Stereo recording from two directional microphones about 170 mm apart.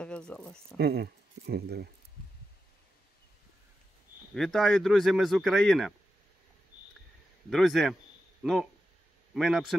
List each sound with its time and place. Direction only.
0.0 s speech: 5° left (ahead or behind)
0.7 s speech: 70° right (ahead or behind)
4.3 s speech: centre (ahead or behind)
7.4 s speech: centre (ahead or behind)